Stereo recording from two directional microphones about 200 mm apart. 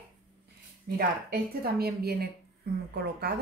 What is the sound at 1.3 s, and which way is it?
A woman's voice, 50° right (ahead or behind).